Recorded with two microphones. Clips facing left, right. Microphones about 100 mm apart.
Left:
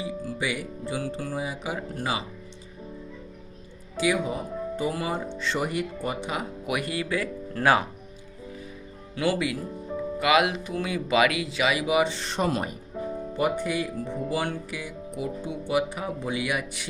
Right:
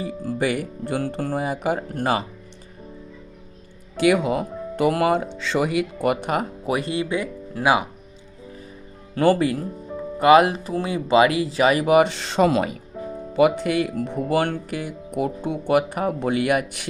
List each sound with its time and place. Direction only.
0.0 s speech: 50° right (ahead or behind)
3.9 s speech: 65° right (ahead or behind); by 6.1 s 90° right
6.1 s speech: 55° right (ahead or behind)
6.7 s speech: 30° right (ahead or behind); by 7.9 s 15° right (ahead or behind)
9.1 s speech: 45° right (ahead or behind)